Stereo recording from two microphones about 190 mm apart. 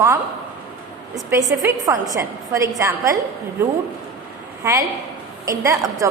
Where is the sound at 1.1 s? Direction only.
15° right (ahead or behind).